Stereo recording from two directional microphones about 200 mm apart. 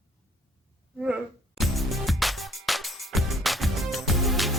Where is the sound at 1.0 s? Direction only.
5° right (ahead or behind).